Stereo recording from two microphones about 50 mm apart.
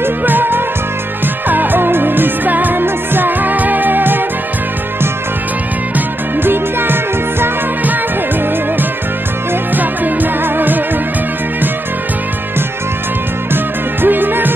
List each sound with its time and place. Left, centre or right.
0.0 s music: right
5.9 s music: right
9.8 s music: right
14.0 s music: right